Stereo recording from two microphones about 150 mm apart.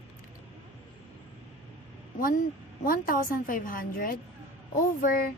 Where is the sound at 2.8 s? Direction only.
65° left (ahead or behind).